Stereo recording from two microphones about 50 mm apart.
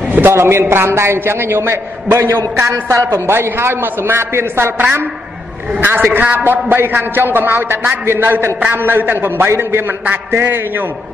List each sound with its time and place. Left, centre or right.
0.3 s a woman's voice: right
2.5 s a woman's voice: right
5.8 s a man's voice: right
9.6 s a man's voice: right